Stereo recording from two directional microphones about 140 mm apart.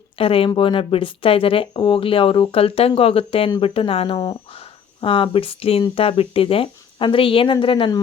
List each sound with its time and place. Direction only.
0.2 s speech: 40° left (ahead or behind)